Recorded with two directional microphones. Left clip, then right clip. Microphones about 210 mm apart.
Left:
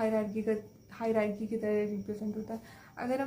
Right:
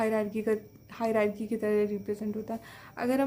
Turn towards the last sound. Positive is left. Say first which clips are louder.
# right 5 dB
turn(degrees=-40)  # may be behind; listen again after turning